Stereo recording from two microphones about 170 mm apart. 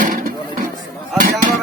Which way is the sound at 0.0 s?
55° right (ahead or behind).